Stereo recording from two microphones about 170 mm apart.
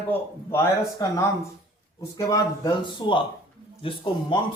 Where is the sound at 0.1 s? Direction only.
15° left (ahead or behind).